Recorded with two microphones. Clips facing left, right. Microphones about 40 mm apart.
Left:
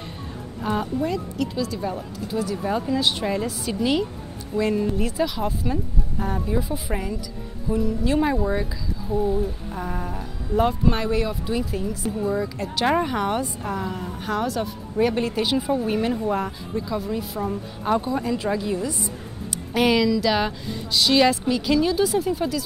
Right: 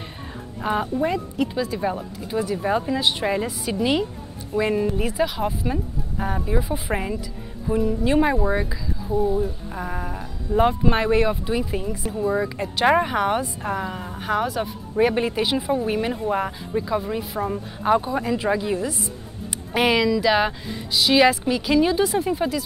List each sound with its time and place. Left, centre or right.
0.6 s speech: centre
6.9 s speech: right
9.1 s speech: centre
21.8 s speech: centre